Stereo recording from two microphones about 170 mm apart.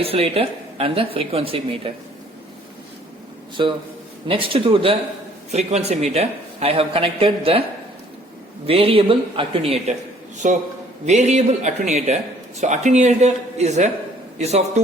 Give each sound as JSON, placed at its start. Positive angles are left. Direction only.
{"t": 0.0, "sound": "speech", "side_deg": -35}
{"t": 3.6, "sound": "a man's voice", "side_deg": -30}
{"t": 8.6, "sound": "speech", "side_deg": -35}
{"t": 10.3, "sound": "a man's voice", "side_deg": -45}